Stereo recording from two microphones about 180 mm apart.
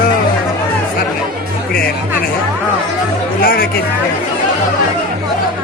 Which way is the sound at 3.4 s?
55° left (ahead or behind).